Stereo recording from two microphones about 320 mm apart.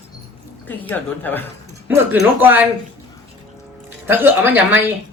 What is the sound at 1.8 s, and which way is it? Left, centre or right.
Speech, centre.